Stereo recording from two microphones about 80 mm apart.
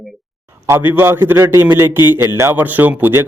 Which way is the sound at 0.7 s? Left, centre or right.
Right.